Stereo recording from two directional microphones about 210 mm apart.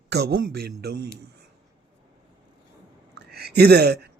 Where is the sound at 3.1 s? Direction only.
50° right (ahead or behind).